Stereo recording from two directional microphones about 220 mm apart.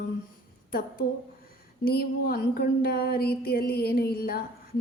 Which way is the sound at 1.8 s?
45° left (ahead or behind).